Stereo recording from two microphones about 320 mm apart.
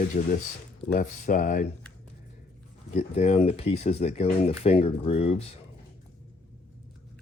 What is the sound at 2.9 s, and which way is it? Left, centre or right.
Speech, left.